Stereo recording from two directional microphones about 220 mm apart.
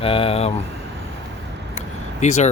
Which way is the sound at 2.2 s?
30° left (ahead or behind).